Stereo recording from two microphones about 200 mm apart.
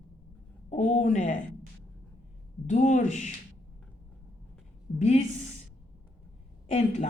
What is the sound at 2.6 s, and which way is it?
Speech, 40° left (ahead or behind).